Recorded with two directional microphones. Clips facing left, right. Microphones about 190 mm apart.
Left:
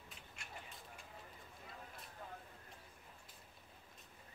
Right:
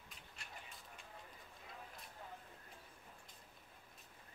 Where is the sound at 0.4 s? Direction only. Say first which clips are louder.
Even; 35° right (ahead or behind).